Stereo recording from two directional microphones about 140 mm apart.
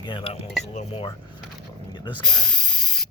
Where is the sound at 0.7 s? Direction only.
50° left (ahead or behind).